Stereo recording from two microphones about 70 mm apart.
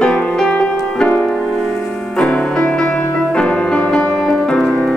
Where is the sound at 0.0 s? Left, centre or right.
Centre.